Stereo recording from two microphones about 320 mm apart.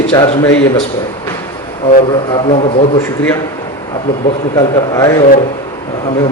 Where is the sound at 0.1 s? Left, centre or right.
Centre.